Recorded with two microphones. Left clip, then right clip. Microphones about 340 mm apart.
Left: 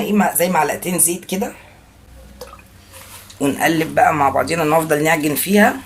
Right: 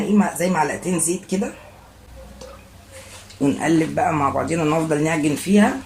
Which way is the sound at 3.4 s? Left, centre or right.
Left.